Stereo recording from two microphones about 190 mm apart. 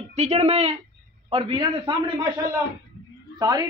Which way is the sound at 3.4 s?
20° right (ahead or behind).